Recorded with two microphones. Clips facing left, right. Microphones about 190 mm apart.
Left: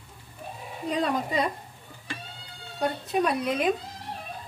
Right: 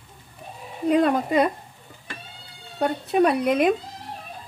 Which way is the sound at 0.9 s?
55° right (ahead or behind).